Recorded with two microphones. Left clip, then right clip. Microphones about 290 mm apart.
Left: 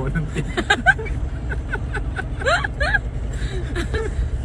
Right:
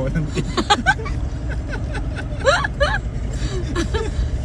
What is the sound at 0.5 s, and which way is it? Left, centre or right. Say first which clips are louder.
Speech: even; centre.